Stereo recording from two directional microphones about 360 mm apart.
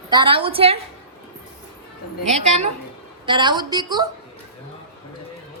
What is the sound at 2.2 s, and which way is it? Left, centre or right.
A woman's voice, centre.